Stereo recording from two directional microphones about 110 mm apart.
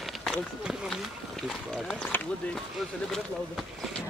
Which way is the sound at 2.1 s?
20° left (ahead or behind).